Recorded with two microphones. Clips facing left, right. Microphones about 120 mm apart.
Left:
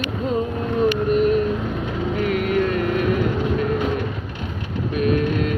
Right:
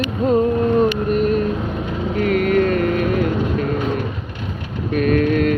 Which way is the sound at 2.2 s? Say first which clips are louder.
Right 5 dB; 50° right (ahead or behind).